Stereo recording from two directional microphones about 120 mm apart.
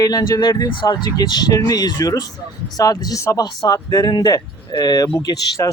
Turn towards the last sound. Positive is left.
turn(degrees=30)  # may be behind; listen again after turning